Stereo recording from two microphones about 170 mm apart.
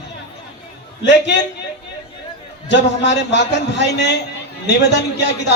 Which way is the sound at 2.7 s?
90° left.